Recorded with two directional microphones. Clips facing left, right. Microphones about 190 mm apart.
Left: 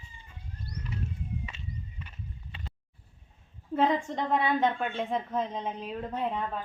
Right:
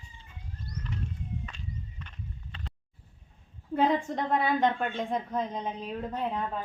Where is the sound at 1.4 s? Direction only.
10° left (ahead or behind).